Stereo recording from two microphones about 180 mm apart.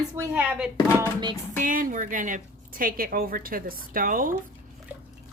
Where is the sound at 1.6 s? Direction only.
50° right (ahead or behind).